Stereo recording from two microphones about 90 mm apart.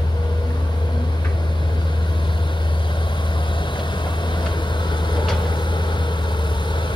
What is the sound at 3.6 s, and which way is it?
Vehicle, 60° left (ahead or behind).